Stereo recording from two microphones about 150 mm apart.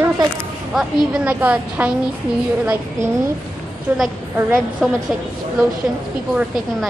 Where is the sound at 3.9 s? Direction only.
15° right (ahead or behind).